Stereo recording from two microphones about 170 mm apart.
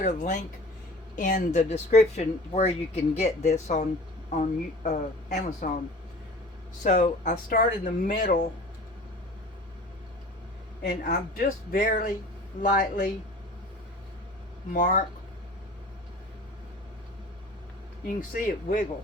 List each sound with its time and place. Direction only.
0.0 s speech: 45° left (ahead or behind)
6.8 s speech: 50° left (ahead or behind)
10.8 s speech: 55° left (ahead or behind)
14.7 s speech: 50° left (ahead or behind)
18.2 s speech: 50° left (ahead or behind)